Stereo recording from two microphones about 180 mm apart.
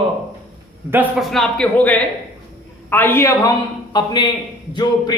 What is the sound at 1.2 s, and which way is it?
A man's voice, centre (ahead or behind).